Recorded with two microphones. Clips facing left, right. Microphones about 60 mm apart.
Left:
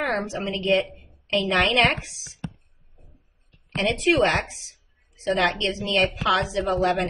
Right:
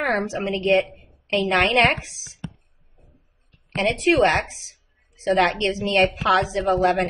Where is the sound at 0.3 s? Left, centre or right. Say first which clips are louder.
Right 3 dB; right.